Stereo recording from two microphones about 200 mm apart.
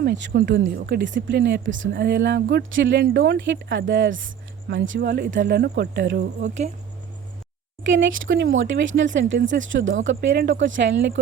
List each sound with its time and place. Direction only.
0.0 s speech: 55° right (ahead or behind); by 3.0 s 70° right (ahead or behind)
3.0 s speech: 55° right (ahead or behind)
4.7 s speech: 55° right (ahead or behind)
6.4 s speech: 35° right (ahead or behind)
7.9 s speech: 65° right (ahead or behind)
10.2 s speech: 60° right (ahead or behind)